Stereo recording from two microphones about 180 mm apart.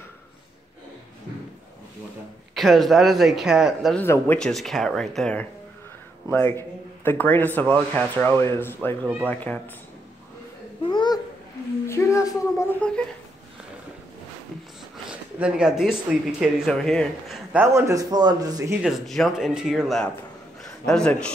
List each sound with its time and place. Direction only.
2.5 s speech: centre (ahead or behind)
4.0 s speech: 10° left (ahead or behind)
10.8 s babbling: 25° left (ahead or behind)
11.8 s speech: 15° left (ahead or behind)
15.3 s speech: 5° right (ahead or behind)
17.5 s speech: 10° right (ahead or behind)
18.8 s speech: centre (ahead or behind)